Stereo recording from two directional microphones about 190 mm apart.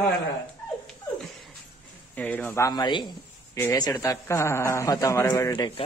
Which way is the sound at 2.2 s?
10° left (ahead or behind).